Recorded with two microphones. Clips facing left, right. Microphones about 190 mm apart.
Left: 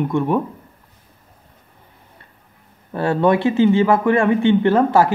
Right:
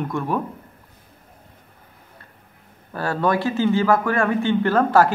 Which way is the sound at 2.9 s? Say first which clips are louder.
Left 5 dB; 25° left (ahead or behind).